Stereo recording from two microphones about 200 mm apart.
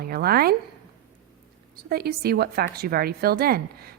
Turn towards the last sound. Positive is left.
turn(degrees=-50)  # may be behind; listen again after turning